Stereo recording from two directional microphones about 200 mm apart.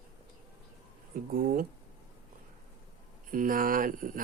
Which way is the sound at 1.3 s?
45° right (ahead or behind).